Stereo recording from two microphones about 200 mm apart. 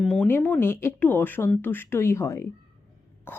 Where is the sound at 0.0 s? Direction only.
5° left (ahead or behind).